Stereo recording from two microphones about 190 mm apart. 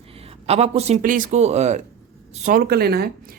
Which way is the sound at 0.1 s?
30° right (ahead or behind).